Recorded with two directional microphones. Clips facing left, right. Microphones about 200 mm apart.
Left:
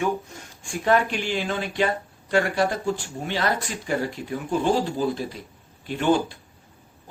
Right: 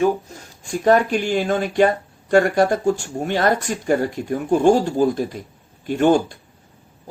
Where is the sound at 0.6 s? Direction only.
40° right (ahead or behind).